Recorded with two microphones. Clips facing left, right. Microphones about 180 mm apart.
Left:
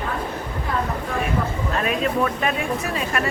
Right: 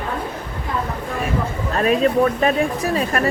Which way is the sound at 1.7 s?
35° right (ahead or behind).